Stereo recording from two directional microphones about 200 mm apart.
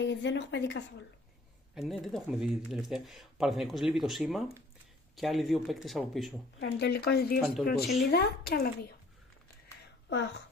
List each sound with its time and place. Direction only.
0.0 s speech: 65° left (ahead or behind)
1.8 s speech: centre (ahead or behind)
6.6 s speech: 55° left (ahead or behind)
7.3 s speech: centre (ahead or behind)
7.6 s speech: 55° left (ahead or behind)
10.0 s speech: 60° left (ahead or behind)